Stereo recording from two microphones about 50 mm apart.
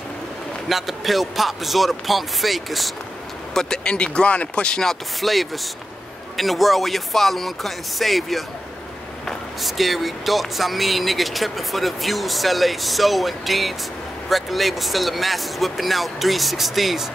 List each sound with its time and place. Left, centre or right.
0.7 s speech: centre
3.5 s speech: centre
4.8 s speech: centre
9.6 s speech: centre